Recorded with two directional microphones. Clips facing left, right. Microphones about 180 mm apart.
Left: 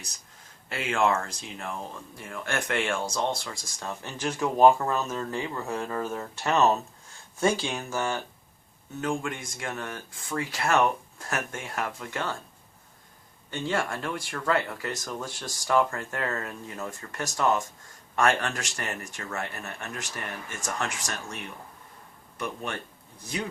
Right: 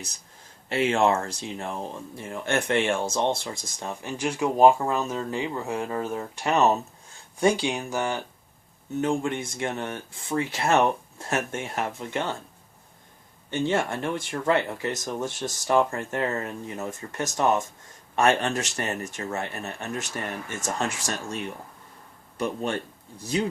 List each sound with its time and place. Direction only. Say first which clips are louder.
0.7 s speech: right 4 dB; 25° right (ahead or behind)
13.5 s speech: right 4 dB; 25° right (ahead or behind)
22.4 s speech: right 6 dB; 30° right (ahead or behind)